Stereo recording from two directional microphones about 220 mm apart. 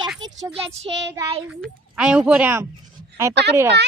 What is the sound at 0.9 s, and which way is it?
Speech, 20° right (ahead or behind).